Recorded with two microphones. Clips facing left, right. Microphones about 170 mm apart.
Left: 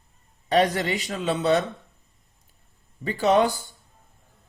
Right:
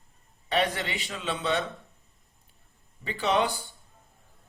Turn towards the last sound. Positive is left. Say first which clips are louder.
# left 6 dB
turn(degrees=45)  # may be behind; listen again after turning